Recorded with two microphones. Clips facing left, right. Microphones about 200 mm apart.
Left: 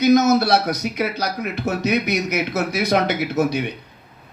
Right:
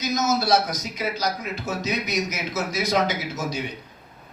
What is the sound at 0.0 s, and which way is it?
A man's voice, 60° left (ahead or behind).